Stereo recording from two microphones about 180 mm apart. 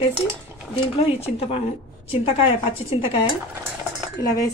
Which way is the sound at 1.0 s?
35° left (ahead or behind).